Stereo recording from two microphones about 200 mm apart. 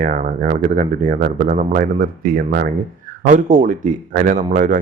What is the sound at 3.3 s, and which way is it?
Speech, 40° right (ahead or behind).